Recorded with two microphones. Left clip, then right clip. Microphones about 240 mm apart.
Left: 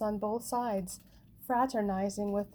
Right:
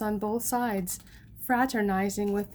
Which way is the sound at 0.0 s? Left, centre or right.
Right.